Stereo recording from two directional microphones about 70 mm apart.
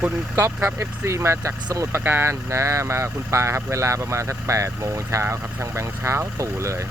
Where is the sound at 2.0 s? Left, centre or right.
Right.